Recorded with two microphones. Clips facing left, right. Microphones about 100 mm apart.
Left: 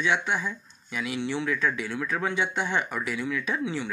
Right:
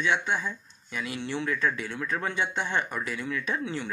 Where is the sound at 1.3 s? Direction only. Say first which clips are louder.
Even; 5° left (ahead or behind).